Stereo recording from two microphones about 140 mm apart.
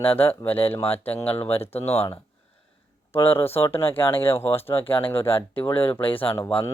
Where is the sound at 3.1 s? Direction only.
15° left (ahead or behind).